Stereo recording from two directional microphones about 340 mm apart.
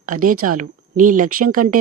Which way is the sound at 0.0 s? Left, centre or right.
Right.